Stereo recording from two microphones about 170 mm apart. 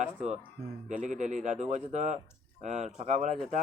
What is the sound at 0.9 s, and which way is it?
Speech, 45° right (ahead or behind).